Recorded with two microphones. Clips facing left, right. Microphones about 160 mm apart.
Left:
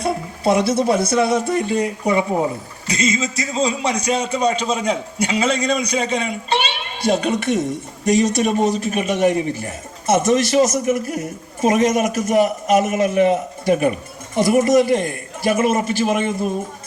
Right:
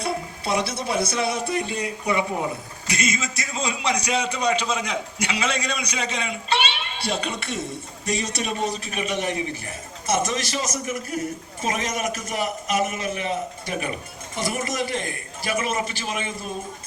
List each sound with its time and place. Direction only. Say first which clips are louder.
0.0 s speech: left 8 dB; 50° left (ahead or behind)
2.9 s a man's voice: left 6 dB; 30° left (ahead or behind); by 16.5 s 50° left (ahead or behind)